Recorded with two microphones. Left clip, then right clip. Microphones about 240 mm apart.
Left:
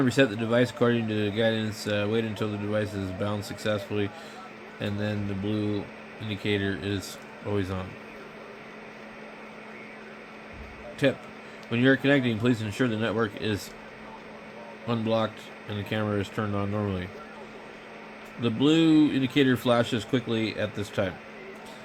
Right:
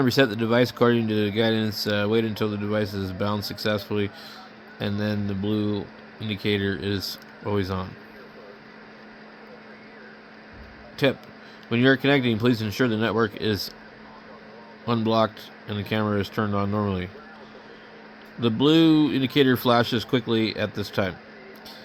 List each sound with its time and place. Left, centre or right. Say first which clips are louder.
0.0 s speech: right 3 dB; right
11.0 s speech: right 2 dB; right
14.8 s speech: right 5 dB; right
18.4 s speech: right 4 dB; right